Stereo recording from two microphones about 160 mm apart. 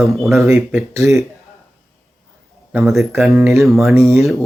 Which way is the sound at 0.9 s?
20° right (ahead or behind).